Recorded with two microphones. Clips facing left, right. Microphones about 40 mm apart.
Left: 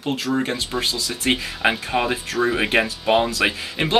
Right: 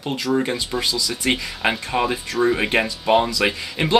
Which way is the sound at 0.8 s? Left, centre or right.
Left.